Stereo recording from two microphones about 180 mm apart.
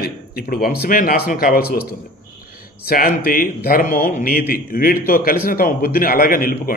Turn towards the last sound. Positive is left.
turn(degrees=50)  # may be behind; listen again after turning